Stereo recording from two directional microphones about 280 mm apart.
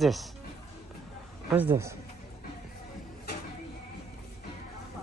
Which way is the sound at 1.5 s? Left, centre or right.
Centre.